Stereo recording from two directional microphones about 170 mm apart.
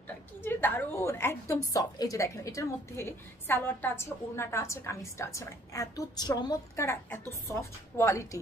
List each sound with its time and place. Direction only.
0.4 s a woman's voice: 10° left (ahead or behind)